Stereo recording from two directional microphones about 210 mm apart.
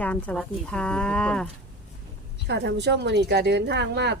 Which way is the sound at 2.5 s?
55° right (ahead or behind).